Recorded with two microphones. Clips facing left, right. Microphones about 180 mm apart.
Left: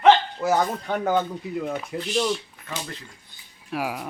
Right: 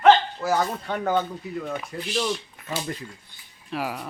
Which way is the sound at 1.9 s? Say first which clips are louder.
Left 3 dB; 15° left (ahead or behind).